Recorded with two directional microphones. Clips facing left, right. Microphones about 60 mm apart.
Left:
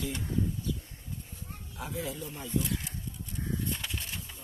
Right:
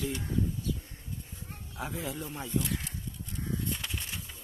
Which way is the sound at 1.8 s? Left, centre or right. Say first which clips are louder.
Even; right.